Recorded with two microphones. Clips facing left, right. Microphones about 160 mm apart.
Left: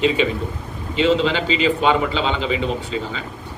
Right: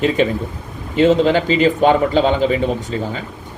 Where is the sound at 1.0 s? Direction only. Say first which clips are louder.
Right 5 dB; 50° right (ahead or behind).